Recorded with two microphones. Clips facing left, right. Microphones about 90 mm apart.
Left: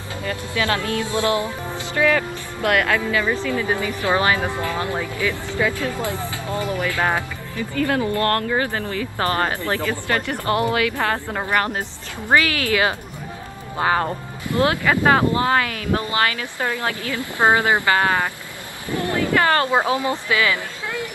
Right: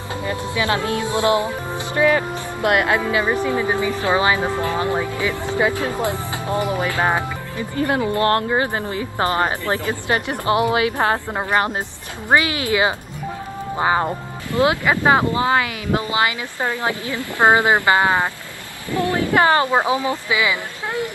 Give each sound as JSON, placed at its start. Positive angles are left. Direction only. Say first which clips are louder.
{"t": 0.2, "sound": "speech", "louder": "right 1 dB", "side_deg": -20}